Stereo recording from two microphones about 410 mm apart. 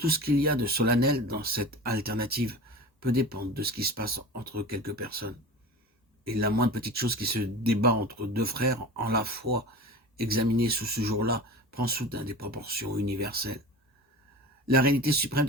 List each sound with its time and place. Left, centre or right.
0.0 s speech: right
14.7 s speech: right